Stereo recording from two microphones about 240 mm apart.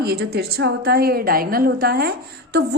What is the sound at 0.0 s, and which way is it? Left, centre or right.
A woman's voice, right.